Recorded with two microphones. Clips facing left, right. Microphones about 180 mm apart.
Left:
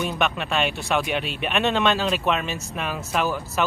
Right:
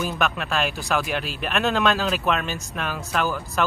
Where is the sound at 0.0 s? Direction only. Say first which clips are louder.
Left 1 dB; centre (ahead or behind).